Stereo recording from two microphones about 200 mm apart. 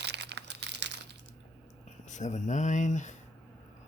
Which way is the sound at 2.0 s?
35° left (ahead or behind).